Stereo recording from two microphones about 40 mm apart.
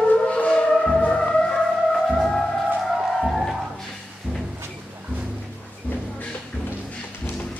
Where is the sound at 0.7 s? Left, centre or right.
Centre.